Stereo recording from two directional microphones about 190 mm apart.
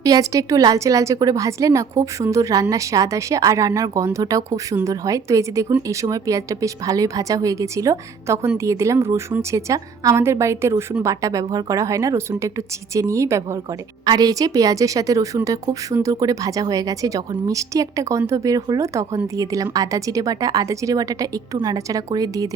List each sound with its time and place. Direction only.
0.0 s a woman's voice: 20° right (ahead or behind)